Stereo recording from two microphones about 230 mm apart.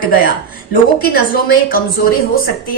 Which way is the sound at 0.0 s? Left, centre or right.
Left.